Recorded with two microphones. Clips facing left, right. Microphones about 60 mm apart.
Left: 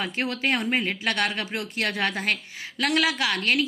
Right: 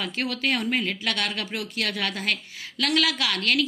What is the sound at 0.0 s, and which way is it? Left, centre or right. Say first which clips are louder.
A woman's voice: left 1 dB; left.